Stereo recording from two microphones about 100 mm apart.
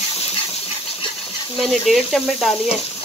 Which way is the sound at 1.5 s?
Centre (ahead or behind).